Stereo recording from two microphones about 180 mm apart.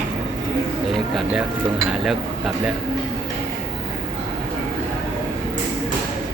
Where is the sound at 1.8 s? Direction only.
Centre (ahead or behind).